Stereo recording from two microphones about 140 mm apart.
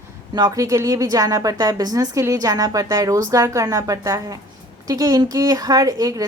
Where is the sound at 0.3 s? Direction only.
25° right (ahead or behind).